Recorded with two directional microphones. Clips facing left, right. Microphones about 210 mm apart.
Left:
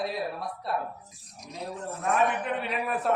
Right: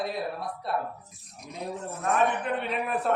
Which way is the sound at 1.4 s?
55° right (ahead or behind).